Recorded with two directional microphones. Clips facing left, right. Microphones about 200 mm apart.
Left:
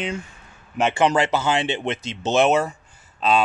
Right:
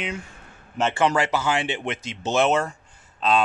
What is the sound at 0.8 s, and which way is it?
Speech, 15° left (ahead or behind).